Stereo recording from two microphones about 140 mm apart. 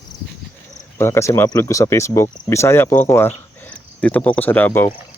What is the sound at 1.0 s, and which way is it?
Speech, 20° left (ahead or behind).